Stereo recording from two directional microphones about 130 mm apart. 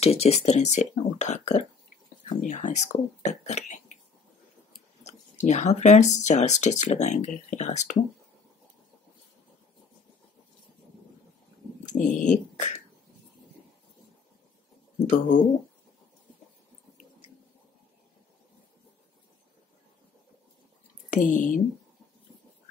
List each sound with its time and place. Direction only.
0.0 s speech: 50° left (ahead or behind)
2.2 s speech: 75° left (ahead or behind)
5.0 s speech: 60° left (ahead or behind)
11.8 s speech: 70° left (ahead or behind)
15.0 s speech: 75° left (ahead or behind)
21.1 s speech: 85° left